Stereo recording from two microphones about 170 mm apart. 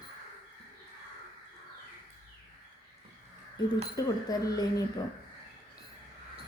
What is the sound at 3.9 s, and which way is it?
Speech, 20° left (ahead or behind).